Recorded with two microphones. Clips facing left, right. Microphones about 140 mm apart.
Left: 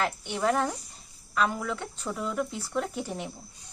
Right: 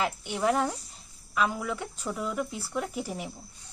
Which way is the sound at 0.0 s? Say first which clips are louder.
Even; 10° right (ahead or behind).